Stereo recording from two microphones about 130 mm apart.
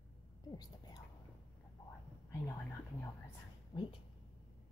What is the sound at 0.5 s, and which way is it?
Whispering, 30° left (ahead or behind).